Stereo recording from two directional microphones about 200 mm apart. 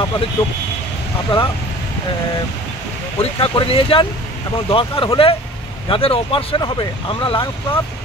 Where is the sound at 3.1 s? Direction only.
25° left (ahead or behind).